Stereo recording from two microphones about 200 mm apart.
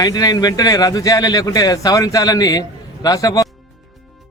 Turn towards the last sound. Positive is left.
turn(degrees=15)  # may be behind; listen again after turning